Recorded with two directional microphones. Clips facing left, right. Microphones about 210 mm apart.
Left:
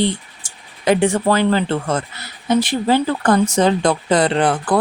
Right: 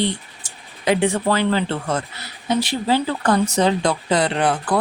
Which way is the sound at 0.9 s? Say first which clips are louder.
Left 3 dB; 45° left (ahead or behind).